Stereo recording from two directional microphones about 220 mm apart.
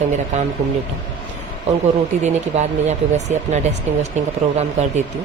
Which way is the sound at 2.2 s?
30° right (ahead or behind).